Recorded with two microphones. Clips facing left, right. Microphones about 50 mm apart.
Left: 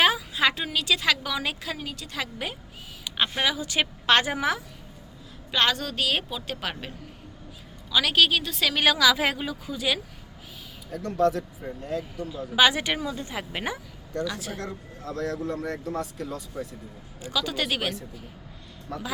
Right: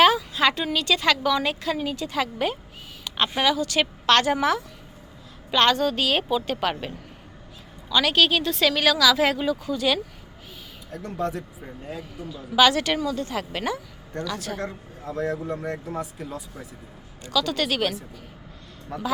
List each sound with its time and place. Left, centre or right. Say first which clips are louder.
0.0 s a woman's voice: right 4 dB; centre
3.4 s a woman's voice: right 7 dB; centre
8.7 s speech: left 1 dB; centre
10.9 s speech: left 5 dB; centre
12.3 s speech: right 3 dB; centre
14.6 s speech: right 3 dB; centre
17.2 s speech: right 4 dB; centre
18.9 s speech: right 1 dB; centre